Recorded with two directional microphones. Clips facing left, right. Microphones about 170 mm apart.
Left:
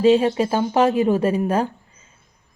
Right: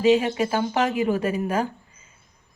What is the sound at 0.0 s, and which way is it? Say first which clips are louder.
Speech: left 3 dB; 30° left (ahead or behind).